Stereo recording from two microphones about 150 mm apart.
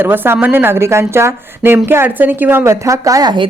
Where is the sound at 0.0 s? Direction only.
15° right (ahead or behind); by 3.5 s 30° right (ahead or behind).